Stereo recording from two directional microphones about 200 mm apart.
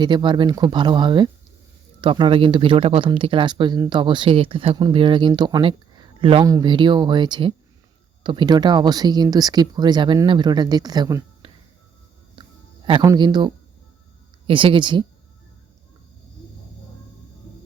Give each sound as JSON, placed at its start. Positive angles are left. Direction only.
{"t": 0.0, "sound": "speech", "side_deg": -20}
{"t": 12.4, "sound": "music", "side_deg": -25}
{"t": 14.4, "sound": "speech", "side_deg": -25}